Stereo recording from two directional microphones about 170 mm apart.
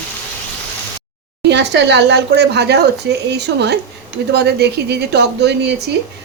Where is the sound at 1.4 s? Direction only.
90° right.